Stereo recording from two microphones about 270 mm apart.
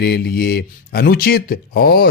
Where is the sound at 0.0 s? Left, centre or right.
Left.